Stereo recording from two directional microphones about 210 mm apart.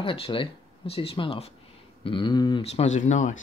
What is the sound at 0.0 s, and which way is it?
Speech, 25° left (ahead or behind).